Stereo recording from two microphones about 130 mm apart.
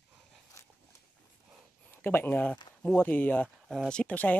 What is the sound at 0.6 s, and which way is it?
Dog, 20° left (ahead or behind).